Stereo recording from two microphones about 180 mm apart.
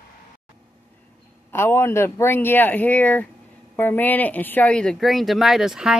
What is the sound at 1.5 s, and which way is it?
Speech, 15° left (ahead or behind).